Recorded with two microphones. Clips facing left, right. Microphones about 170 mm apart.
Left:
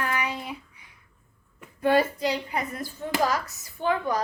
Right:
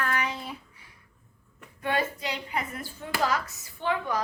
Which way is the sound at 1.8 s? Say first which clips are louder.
Left 7 dB; 35° left (ahead or behind).